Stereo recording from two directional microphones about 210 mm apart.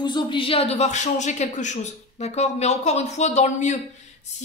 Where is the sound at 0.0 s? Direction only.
20° left (ahead or behind).